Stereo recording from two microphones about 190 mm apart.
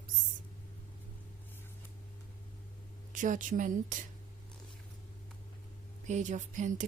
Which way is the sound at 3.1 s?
45° right (ahead or behind).